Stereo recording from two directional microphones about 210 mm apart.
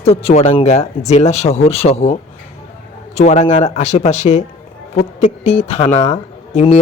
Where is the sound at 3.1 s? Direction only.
35° left (ahead or behind).